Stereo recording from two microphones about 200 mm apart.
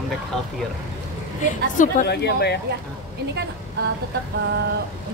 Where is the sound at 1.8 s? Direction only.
50° left (ahead or behind).